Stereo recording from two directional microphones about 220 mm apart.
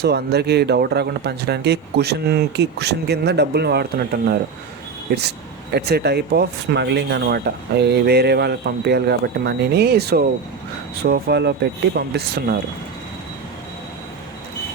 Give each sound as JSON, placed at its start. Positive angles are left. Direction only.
{"t": 0.0, "sound": "speech", "side_deg": -50}